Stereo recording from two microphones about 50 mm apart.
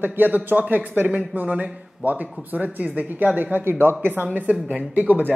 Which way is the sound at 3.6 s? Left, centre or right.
Right.